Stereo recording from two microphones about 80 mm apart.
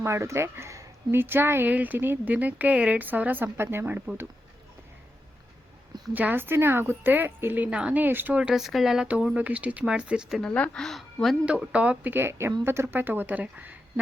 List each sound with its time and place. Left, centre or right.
0.0 s speech: right
1.2 s speech: right
6.1 s speech: right
8.4 s speech: centre
10.4 s speech: centre
10.8 s speech: centre
11.4 s speech: centre
12.1 s a woman's voice: right